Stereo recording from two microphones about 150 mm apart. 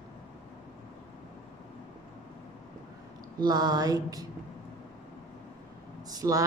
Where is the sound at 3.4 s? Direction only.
25° right (ahead or behind).